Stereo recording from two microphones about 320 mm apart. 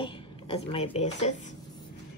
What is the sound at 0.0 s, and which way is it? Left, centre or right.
Speech, centre.